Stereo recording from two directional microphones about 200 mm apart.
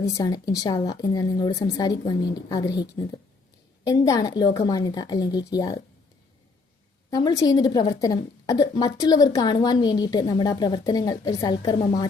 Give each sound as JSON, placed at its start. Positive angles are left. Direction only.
{"t": 0.0, "sound": "a woman's voice", "side_deg": 20}
{"t": 7.1, "sound": "a woman's voice", "side_deg": 20}